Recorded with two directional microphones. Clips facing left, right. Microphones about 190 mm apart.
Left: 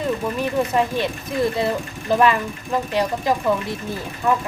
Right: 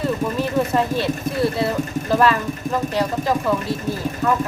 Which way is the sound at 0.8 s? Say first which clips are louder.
Right 1 dB; 15° left (ahead or behind).